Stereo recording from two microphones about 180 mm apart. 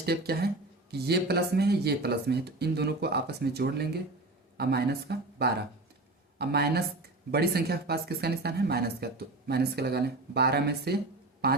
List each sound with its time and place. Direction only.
0.0 s speech: 60° right (ahead or behind)